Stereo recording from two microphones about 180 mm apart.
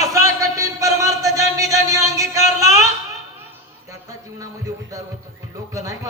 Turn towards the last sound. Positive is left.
turn(degrees=-20)  # may be behind; listen again after turning